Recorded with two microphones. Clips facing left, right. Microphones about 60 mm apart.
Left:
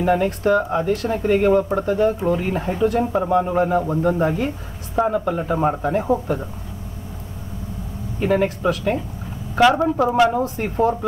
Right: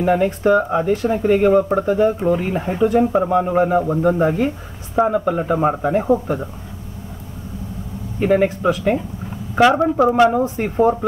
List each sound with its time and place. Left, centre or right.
0.0 s speech: centre
8.2 s speech: centre
8.5 s speech: right